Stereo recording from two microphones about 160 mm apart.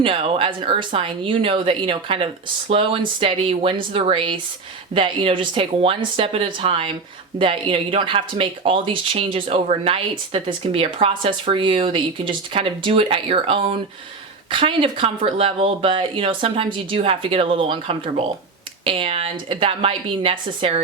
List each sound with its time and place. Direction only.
0.0 s speech: 35° right (ahead or behind)